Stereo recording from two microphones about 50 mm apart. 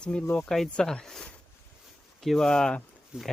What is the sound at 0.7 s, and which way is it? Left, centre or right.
Speech, centre.